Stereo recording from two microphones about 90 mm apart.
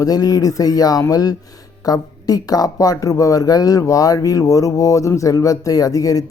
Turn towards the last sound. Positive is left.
turn(degrees=40)  # may be behind; listen again after turning